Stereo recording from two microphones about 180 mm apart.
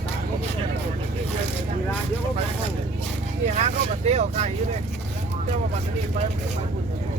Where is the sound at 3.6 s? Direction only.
35° right (ahead or behind).